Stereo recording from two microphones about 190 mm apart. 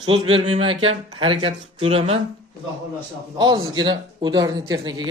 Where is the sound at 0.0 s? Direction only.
30° right (ahead or behind).